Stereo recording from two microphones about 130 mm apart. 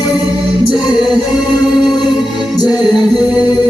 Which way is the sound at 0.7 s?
35° left (ahead or behind).